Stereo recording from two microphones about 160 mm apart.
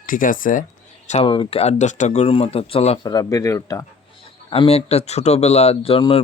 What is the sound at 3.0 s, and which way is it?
Speech, 20° left (ahead or behind).